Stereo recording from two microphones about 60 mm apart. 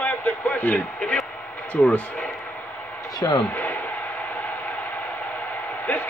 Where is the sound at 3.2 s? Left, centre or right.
Left.